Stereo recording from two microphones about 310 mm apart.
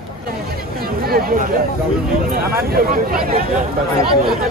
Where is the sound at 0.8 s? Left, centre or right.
Right.